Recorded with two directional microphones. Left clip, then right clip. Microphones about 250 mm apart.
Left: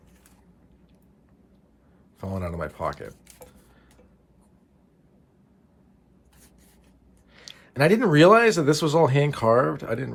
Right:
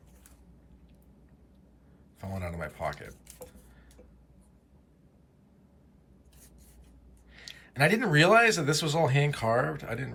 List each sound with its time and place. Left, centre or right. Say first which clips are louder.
2.2 s a man's voice: left 6 dB; centre
7.3 s a man's voice: left 4 dB; centre